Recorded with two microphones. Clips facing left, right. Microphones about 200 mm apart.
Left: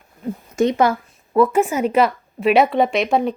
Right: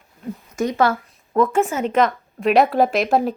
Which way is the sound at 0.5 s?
30° left (ahead or behind).